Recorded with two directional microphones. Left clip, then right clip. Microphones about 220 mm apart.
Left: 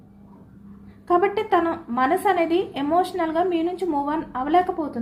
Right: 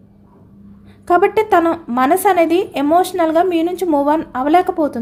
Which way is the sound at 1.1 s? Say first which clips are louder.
Right 7 dB; 55° right (ahead or behind).